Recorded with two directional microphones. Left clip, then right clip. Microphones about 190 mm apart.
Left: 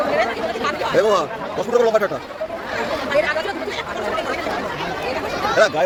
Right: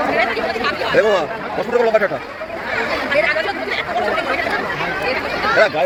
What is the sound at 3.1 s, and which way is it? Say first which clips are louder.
Chatter: right 2 dB; 55° left (ahead or behind).